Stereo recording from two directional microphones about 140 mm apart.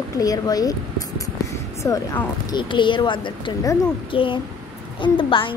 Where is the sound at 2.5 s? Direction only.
35° left (ahead or behind).